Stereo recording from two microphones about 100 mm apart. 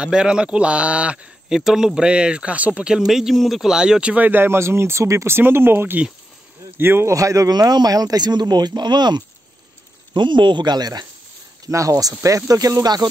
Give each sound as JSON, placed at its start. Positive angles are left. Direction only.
{"t": 0.0, "sound": "speech", "side_deg": -10}